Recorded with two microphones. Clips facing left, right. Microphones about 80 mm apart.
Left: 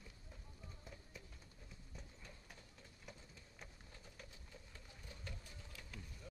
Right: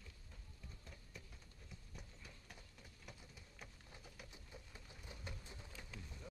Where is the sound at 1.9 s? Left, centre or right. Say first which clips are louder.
Left 2 dB; centre.